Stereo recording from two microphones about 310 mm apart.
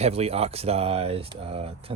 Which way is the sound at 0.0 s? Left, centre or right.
Centre.